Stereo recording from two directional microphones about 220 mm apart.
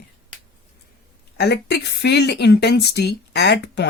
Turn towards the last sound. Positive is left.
turn(degrees=50)  # may be behind; listen again after turning